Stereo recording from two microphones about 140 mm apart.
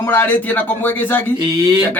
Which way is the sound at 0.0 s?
15° left (ahead or behind).